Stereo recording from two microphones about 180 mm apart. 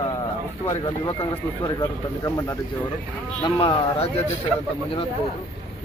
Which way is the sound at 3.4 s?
30° left (ahead or behind).